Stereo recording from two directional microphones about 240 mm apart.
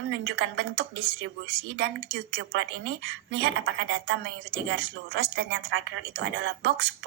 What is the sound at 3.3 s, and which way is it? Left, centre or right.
A woman's voice, right.